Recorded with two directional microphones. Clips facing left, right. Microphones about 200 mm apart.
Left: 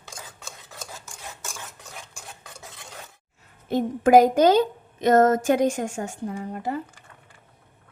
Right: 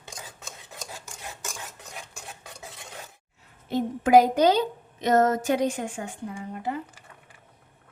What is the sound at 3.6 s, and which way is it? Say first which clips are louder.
A woman's voice: left 4 dB; 50° left (ahead or behind).